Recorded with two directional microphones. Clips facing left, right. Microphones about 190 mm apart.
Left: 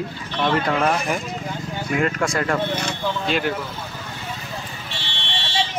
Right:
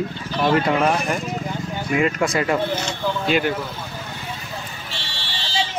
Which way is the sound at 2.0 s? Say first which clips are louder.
Right 2 dB; 5° right (ahead or behind).